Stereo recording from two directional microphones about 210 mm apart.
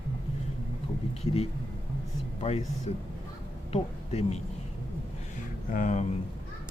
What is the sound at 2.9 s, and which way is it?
Speech, 30° left (ahead or behind).